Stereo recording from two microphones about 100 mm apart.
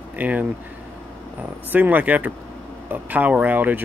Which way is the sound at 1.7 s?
15° right (ahead or behind).